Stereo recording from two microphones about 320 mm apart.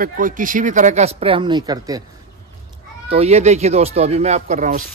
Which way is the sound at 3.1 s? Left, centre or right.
Centre.